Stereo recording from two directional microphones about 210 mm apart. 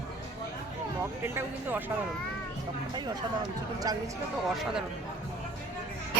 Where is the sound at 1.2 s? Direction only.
10° right (ahead or behind).